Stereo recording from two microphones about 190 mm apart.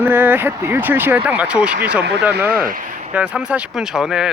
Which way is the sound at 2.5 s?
45° right (ahead or behind).